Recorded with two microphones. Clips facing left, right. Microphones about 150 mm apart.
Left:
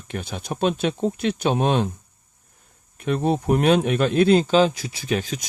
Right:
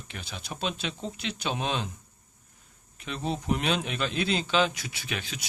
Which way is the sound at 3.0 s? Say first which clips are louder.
Left 11 dB; 55° left (ahead or behind).